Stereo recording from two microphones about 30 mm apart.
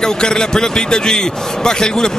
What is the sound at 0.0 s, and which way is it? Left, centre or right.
A man's voice, left.